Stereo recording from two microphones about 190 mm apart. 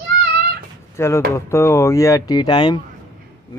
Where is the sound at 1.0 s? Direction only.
15° left (ahead or behind).